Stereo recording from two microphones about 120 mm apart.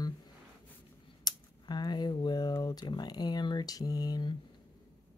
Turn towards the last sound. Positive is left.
turn(degrees=35)  # may be behind; listen again after turning